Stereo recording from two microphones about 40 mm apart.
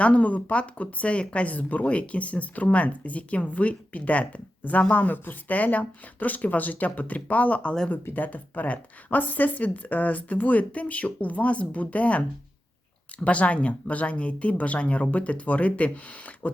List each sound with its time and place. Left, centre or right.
0.0 s speech: left
9.0 s speech: left
13.2 s speech: left